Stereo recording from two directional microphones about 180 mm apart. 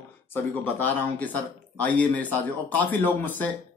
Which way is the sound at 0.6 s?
10° left (ahead or behind).